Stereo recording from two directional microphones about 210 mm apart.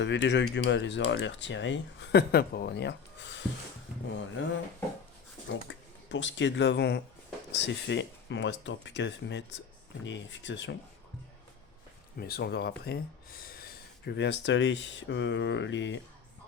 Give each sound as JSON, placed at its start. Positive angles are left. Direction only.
{"t": 0.0, "sound": "speech", "side_deg": 55}
{"t": 12.2, "sound": "speech", "side_deg": 50}